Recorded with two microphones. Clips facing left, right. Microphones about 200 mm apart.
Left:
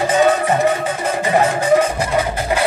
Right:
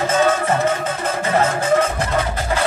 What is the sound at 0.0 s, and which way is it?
Music, 15° left (ahead or behind).